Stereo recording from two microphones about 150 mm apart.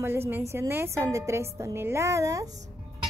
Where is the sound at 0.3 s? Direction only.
15° right (ahead or behind).